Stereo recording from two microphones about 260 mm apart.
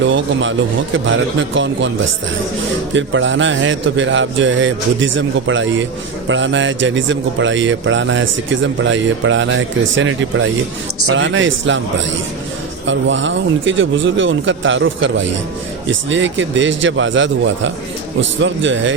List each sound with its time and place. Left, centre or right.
0.0 s speech: right
2.9 s speech: right
12.8 s speech: right